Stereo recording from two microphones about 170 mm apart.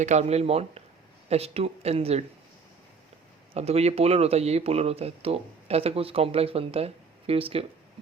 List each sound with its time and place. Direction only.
0.0 s speech: 40° right (ahead or behind)
3.5 s speech: 40° right (ahead or behind)